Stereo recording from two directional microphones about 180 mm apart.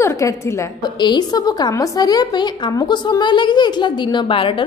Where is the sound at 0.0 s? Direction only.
15° left (ahead or behind).